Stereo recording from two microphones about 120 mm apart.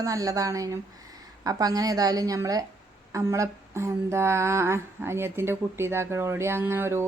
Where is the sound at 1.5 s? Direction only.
30° right (ahead or behind).